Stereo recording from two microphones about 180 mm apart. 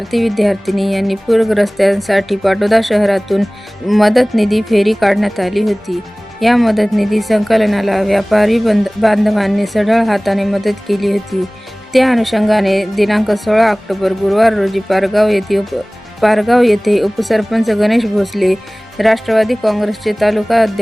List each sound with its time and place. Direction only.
0.1 s a woman's voice: centre (ahead or behind)